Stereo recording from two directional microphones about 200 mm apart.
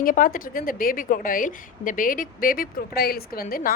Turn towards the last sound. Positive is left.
turn(degrees=45)  # may be behind; listen again after turning